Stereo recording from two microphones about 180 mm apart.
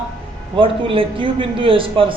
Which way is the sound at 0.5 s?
30° right (ahead or behind).